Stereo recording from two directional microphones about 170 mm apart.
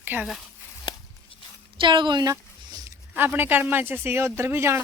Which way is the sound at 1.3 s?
30° left (ahead or behind).